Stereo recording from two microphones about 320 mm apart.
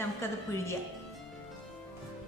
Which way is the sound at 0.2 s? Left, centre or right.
Centre.